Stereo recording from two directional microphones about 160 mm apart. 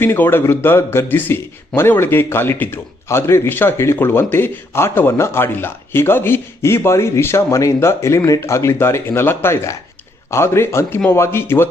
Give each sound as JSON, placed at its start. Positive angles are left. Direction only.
{"t": 0.0, "sound": "speech", "side_deg": 15}